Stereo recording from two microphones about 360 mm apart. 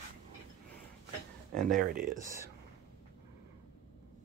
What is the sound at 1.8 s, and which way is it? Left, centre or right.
Speech, right.